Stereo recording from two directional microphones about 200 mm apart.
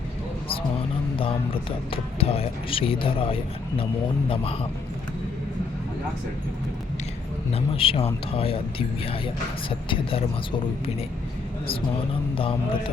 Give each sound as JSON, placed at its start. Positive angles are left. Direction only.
{"t": 0.4, "sound": "music", "side_deg": 25}
{"t": 1.9, "sound": "speech", "side_deg": 30}
{"t": 7.5, "sound": "speech", "side_deg": 30}